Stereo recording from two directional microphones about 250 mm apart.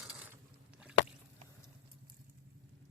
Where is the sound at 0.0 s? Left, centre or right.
Centre.